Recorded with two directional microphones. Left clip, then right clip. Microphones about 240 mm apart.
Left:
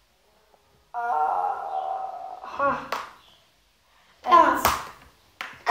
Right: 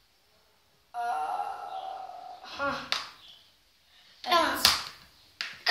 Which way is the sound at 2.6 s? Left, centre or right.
Right.